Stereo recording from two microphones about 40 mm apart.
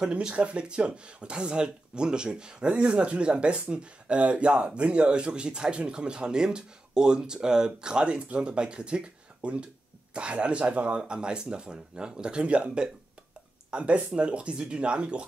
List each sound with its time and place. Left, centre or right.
0.0 s speech: right